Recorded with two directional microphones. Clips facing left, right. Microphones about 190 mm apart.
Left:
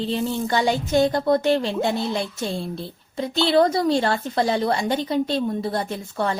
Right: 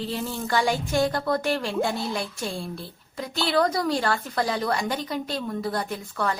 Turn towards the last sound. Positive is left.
turn(degrees=25)  # may be behind; listen again after turning